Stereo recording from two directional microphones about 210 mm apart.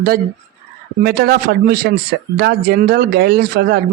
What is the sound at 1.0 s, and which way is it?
Speech, 50° right (ahead or behind).